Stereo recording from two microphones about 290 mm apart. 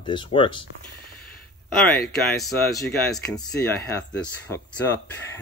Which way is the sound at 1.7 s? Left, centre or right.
Centre.